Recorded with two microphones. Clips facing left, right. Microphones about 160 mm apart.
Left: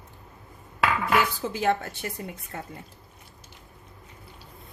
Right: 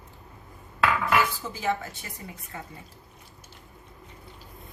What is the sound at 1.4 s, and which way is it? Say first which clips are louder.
Speech: left 4 dB; 65° left (ahead or behind).